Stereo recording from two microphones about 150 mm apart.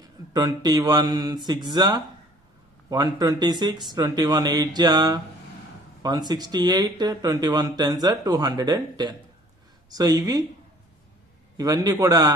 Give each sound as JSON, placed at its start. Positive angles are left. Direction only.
{"t": 0.3, "sound": "speech", "side_deg": -25}
{"t": 11.5, "sound": "speech", "side_deg": -25}